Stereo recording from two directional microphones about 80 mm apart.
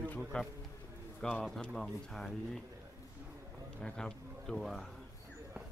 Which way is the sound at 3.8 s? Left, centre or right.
Centre.